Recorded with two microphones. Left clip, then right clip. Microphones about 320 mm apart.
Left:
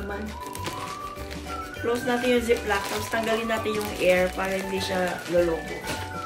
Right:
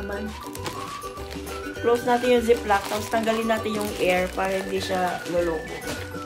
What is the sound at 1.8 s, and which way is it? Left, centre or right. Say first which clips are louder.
Speech: right 4 dB; centre.